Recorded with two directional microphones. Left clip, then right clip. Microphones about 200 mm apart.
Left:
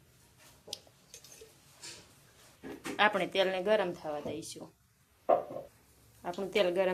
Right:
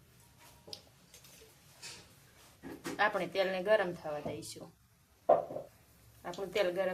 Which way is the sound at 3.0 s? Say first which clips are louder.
Left 3 dB; 15° left (ahead or behind).